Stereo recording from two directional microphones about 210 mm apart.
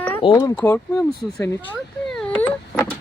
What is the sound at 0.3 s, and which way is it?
Speech, 15° left (ahead or behind).